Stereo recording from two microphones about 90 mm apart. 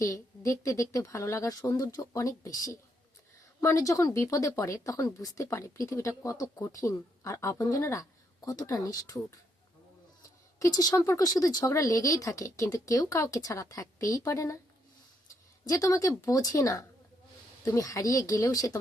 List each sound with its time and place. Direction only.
0.0 s speech: 35° left (ahead or behind)
10.2 s speech: 40° left (ahead or behind)
15.6 s speech: 40° left (ahead or behind)